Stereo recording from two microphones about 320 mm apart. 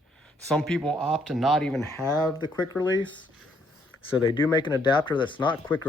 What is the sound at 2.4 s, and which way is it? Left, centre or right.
Speech, centre.